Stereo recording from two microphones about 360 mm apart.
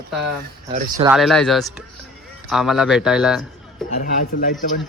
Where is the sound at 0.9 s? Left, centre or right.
Centre.